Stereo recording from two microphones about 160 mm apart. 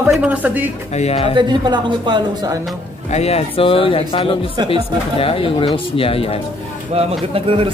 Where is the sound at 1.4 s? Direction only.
25° right (ahead or behind).